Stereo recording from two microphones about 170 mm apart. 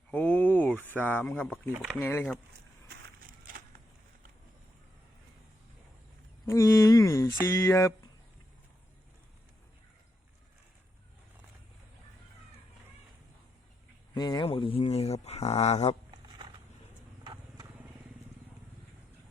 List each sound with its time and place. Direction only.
0.1 s speech: 5° left (ahead or behind)
6.4 s a sound: 15° left (ahead or behind)
7.4 s speech: 15° left (ahead or behind)
14.1 s speech: 25° left (ahead or behind)